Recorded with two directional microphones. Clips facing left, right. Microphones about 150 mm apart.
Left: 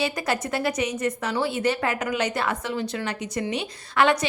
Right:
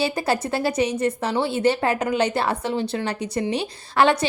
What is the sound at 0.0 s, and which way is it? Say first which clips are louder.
A woman's voice: right 3 dB; 30° right (ahead or behind).